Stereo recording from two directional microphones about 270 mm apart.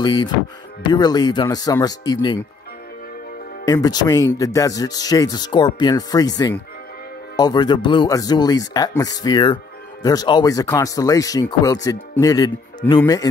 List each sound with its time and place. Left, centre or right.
0.0 s speech: centre
3.6 s speech: centre